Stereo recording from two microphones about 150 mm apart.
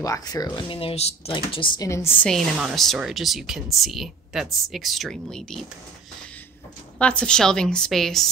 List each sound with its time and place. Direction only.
0.0 s speech: 25° left (ahead or behind)
1.9 s a woman's voice: 15° left (ahead or behind)
7.0 s a woman's voice: 5° left (ahead or behind)